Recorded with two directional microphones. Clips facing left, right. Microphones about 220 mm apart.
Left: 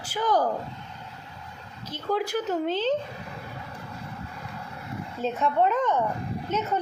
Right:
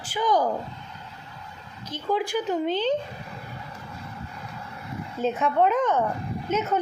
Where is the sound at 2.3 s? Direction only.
5° left (ahead or behind).